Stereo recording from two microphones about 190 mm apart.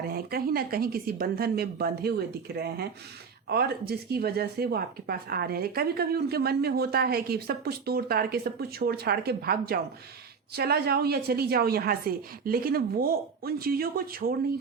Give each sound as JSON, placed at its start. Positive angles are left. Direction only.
{"t": 0.1, "sound": "a woman's voice", "side_deg": -55}